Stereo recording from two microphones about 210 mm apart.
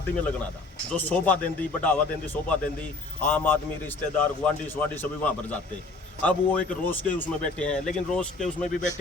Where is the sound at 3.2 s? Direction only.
10° left (ahead or behind).